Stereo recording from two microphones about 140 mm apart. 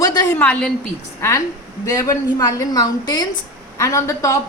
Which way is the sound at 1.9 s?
25° left (ahead or behind).